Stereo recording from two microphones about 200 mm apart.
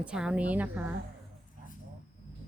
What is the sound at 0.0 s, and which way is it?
Speech, 5° right (ahead or behind).